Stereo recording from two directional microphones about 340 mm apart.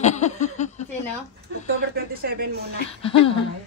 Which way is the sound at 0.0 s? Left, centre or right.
Left.